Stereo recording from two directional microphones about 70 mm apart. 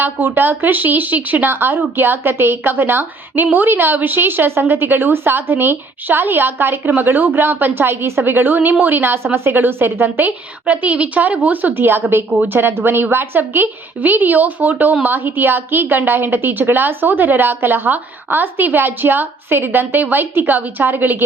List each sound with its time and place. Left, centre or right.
0.0 s a woman's voice: right